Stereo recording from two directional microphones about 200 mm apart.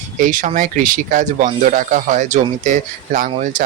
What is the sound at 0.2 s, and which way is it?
Speech, 40° right (ahead or behind).